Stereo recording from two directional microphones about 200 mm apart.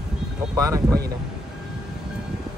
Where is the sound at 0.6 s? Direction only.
15° right (ahead or behind).